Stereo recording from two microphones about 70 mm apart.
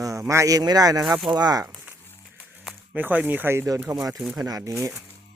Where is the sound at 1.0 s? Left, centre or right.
Centre.